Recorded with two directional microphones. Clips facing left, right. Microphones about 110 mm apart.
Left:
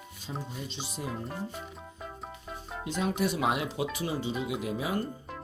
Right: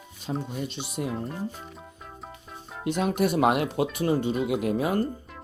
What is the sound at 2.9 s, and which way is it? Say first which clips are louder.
Speech: right 5 dB; 60° right (ahead or behind).